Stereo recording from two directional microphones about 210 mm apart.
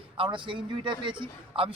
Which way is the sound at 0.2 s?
25° right (ahead or behind).